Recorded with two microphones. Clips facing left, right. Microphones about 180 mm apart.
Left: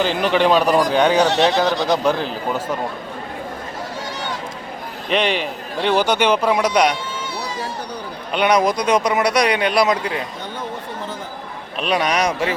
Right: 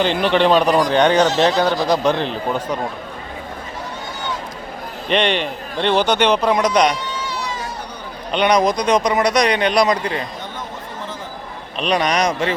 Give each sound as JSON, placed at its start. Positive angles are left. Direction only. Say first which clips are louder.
{"t": 0.0, "sound": "speech", "louder": "right 1 dB", "side_deg": 5}
{"t": 5.0, "sound": "speech", "louder": "right 1 dB", "side_deg": 5}
{"t": 7.3, "sound": "a sound", "louder": "even", "side_deg": 35}
{"t": 8.3, "sound": "speech", "louder": "right 1 dB", "side_deg": 5}
{"t": 11.8, "sound": "speech", "louder": "right 1 dB", "side_deg": 5}